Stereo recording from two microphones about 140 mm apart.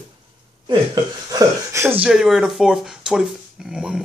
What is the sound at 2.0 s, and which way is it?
Speech, 5° right (ahead or behind).